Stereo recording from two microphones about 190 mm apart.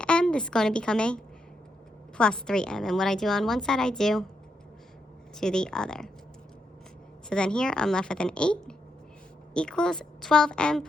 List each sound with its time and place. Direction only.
0.0 s a woman's voice: 5° left (ahead or behind)
5.4 s a woman's voice: 5° left (ahead or behind)
7.3 s a woman's voice: 5° left (ahead or behind)